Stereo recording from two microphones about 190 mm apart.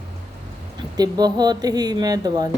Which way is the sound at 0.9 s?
20° right (ahead or behind).